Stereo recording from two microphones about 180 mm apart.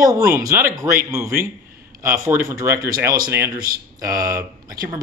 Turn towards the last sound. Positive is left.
turn(degrees=-20)  # may be behind; listen again after turning